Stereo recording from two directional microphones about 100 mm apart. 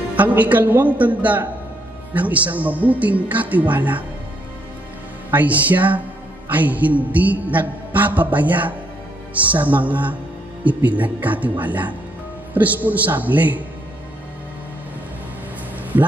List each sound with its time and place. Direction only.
0.1 s mantra: 15° right (ahead or behind)
5.3 s mantra: 15° right (ahead or behind)
15.9 s speech: 20° right (ahead or behind)